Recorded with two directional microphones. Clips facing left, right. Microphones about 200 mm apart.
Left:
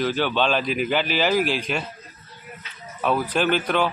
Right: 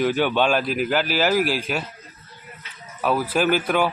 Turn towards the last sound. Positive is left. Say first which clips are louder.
# right 1 dB
turn(degrees=-10)  # may be behind; listen again after turning